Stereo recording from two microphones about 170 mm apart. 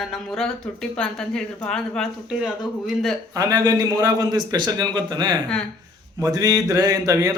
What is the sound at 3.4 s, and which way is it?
Speech, 20° right (ahead or behind).